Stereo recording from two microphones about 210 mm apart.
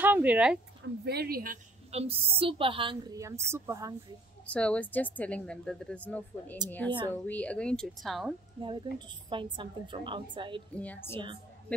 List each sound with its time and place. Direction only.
0.0 s speech: 10° right (ahead or behind)
1.0 s a woman's voice: 50° right (ahead or behind); by 3.9 s 15° right (ahead or behind)
4.5 s a woman's voice: 5° left (ahead or behind)
8.5 s a woman's voice: 20° right (ahead or behind)
10.7 s a woman's voice: 5° left (ahead or behind)